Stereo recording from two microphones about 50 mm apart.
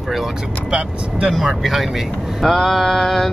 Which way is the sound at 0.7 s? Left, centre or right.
Right.